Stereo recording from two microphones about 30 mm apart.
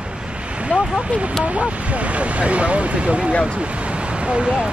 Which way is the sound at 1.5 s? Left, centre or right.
Right.